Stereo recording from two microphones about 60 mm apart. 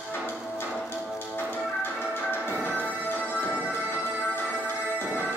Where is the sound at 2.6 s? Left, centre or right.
Left.